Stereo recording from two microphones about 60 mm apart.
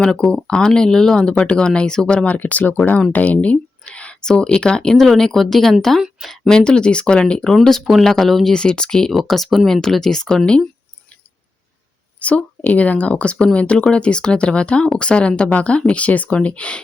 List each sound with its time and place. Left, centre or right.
0.0 s speech: centre
6.6 s speech: centre
8.5 s speech: centre
12.2 s speech: left